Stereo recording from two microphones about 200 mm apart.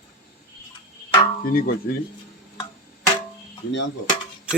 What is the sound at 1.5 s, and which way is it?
Speech, 45° left (ahead or behind).